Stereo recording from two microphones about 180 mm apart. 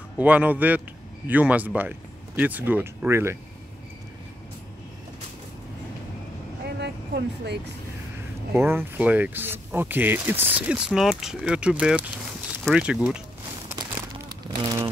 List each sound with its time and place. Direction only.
0.2 s speech: 10° right (ahead or behind)
6.8 s vehicle: 70° right (ahead or behind)
8.5 s speech: 10° right (ahead or behind)
14.6 s speech: 20° right (ahead or behind)